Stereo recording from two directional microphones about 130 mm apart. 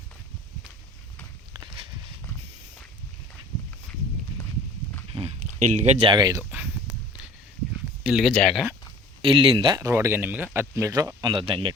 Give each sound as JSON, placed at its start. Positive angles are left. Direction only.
{"t": 5.5, "sound": "speech", "side_deg": -70}
{"t": 6.1, "sound": "speech", "side_deg": -30}
{"t": 6.5, "sound": "a sound", "side_deg": -10}
{"t": 8.1, "sound": "speech", "side_deg": 0}
{"t": 9.2, "sound": "speech", "side_deg": -40}
{"t": 9.8, "sound": "speech", "side_deg": -20}